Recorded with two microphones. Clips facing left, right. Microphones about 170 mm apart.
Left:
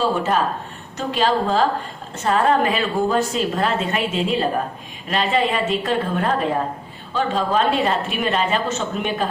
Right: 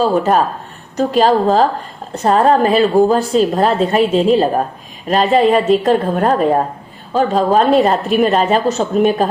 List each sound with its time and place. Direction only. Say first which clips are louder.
0.0 s a woman's voice: right 6 dB; 40° right (ahead or behind)